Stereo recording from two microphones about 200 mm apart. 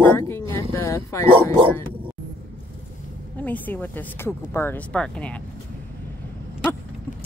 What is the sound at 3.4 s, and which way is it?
Speech, 10° left (ahead or behind).